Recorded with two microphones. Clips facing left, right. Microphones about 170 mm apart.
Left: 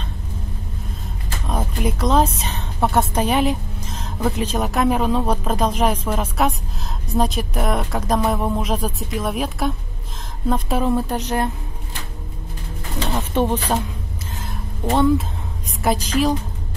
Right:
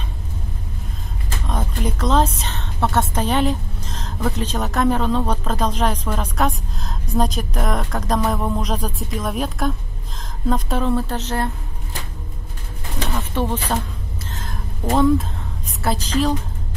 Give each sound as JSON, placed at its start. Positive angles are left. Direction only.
{"t": 1.5, "sound": "a woman's voice", "side_deg": 10}
{"t": 13.1, "sound": "speech", "side_deg": 20}
{"t": 14.3, "sound": "a sound", "side_deg": 5}
{"t": 15.8, "sound": "speech", "side_deg": 10}